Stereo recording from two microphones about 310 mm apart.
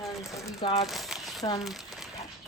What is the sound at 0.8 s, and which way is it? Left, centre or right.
Crumpling, centre.